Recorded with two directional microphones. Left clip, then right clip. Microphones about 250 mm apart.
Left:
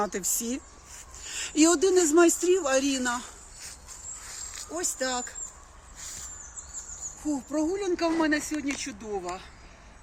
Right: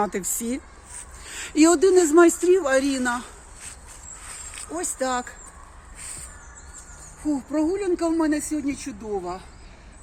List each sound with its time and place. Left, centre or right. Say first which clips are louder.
0.0 s speech: right 4 dB; left
3.0 s speech: right 4 dB; centre
4.8 s speech: right 5 dB; left
7.7 s speech: right 2 dB; centre